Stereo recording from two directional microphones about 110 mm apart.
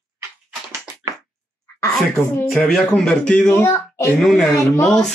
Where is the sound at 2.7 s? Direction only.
5° left (ahead or behind).